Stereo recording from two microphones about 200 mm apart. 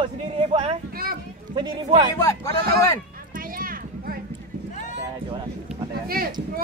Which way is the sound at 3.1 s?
45° right (ahead or behind).